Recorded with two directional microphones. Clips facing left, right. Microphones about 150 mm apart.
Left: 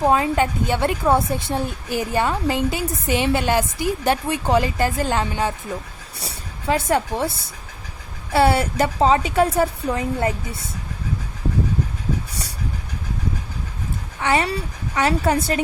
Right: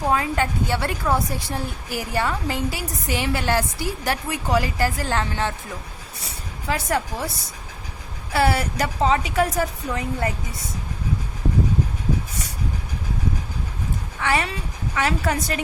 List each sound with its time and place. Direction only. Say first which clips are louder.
0.0 s a woman's voice: left 4 dB; 25° left (ahead or behind)
6.2 s a woman's voice: left 4 dB; 25° left (ahead or behind)
14.2 s speech: left 3 dB; 25° left (ahead or behind)
14.4 s a woman's voice: left 4 dB; 35° left (ahead or behind)